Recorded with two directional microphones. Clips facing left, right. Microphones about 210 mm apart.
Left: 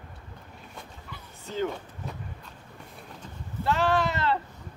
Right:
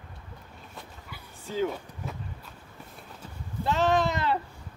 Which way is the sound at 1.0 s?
5° right (ahead or behind).